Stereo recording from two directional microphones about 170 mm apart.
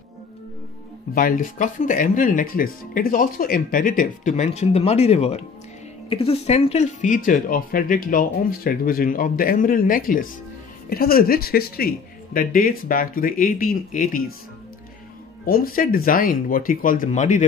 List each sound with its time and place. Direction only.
1.1 s speech: 55° left (ahead or behind)
15.4 s speech: 60° left (ahead or behind)